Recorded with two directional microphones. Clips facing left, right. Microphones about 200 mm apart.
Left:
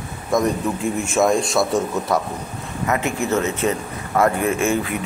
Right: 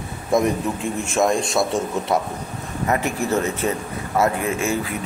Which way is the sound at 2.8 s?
35° right (ahead or behind).